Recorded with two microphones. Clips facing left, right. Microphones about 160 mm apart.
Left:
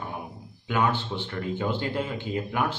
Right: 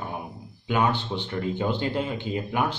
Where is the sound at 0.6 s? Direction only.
20° right (ahead or behind).